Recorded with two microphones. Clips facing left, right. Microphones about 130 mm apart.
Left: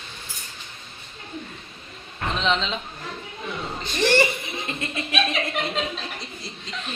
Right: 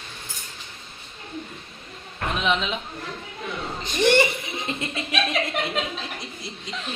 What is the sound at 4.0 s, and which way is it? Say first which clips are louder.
Speech: right 2 dB; 20° right (ahead or behind).